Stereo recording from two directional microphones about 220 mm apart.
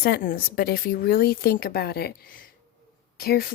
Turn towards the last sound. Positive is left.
turn(degrees=45)  # may be behind; listen again after turning